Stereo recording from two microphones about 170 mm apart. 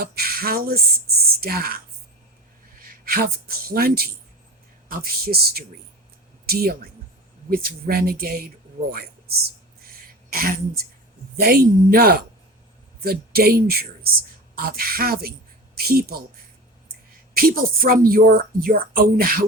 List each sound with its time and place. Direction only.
0.0 s speech: 65° right (ahead or behind)
2.8 s speech: 60° right (ahead or behind)
17.3 s speech: 60° right (ahead or behind)